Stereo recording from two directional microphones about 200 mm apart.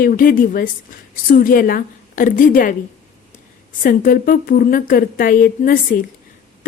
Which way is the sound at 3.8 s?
45° left (ahead or behind).